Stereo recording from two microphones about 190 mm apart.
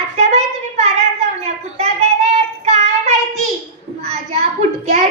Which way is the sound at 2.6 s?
35° right (ahead or behind).